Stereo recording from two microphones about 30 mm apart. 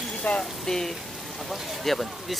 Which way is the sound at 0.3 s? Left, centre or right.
Left.